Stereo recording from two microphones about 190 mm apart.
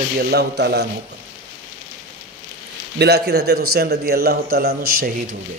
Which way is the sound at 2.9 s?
60° right (ahead or behind).